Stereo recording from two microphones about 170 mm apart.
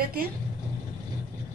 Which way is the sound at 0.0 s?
60° right (ahead or behind).